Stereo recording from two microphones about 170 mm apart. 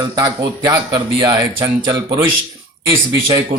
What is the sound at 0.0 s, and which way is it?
Speech, 25° right (ahead or behind).